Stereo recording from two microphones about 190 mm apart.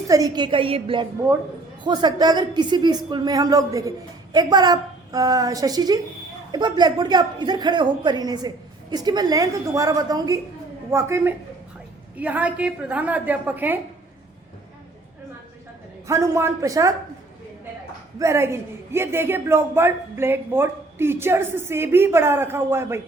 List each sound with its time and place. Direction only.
0.1 s a woman's voice: 20° right (ahead or behind)
16.0 s speech: 15° right (ahead or behind)
18.2 s speech: 15° right (ahead or behind)